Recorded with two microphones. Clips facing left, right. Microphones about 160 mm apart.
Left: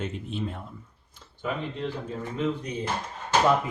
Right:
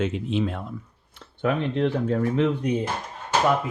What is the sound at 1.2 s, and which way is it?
Speech, 70° right (ahead or behind).